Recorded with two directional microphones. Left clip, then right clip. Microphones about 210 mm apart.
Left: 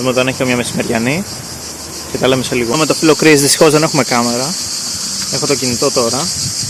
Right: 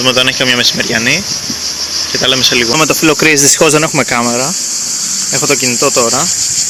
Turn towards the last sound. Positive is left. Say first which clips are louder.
# right 3 dB
turn(degrees=-5)  # may be behind; listen again after turning